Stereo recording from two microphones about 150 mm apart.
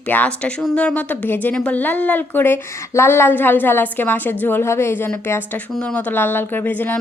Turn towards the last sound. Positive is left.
turn(degrees=10)  # may be behind; listen again after turning